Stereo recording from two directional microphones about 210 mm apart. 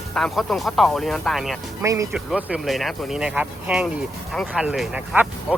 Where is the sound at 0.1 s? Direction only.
Centre (ahead or behind).